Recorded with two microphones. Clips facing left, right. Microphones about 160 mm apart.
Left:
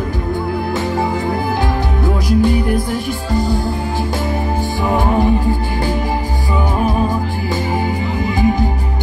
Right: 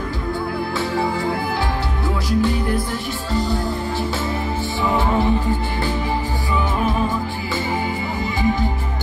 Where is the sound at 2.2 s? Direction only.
15° left (ahead or behind).